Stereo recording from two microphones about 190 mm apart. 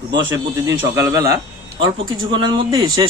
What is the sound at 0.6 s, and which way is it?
A man's voice, 15° right (ahead or behind).